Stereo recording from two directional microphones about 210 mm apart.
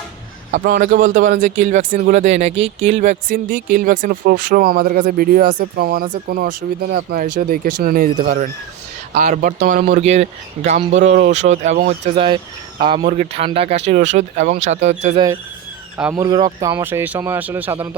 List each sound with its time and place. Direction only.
0.5 s speech: 40° right (ahead or behind)
16.1 s speech: 20° right (ahead or behind)